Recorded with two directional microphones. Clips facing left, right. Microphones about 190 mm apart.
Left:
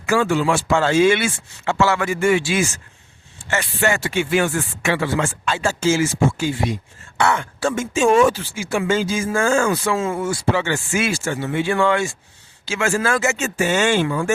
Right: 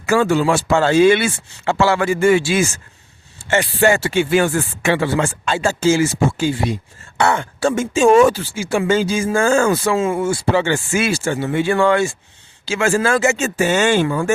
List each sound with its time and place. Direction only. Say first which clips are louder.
0.0 s speech: right 3 dB; 40° right (ahead or behind)
9.9 s speech: right 4 dB; 20° right (ahead or behind)
11.5 s speech: right 3 dB; 45° right (ahead or behind)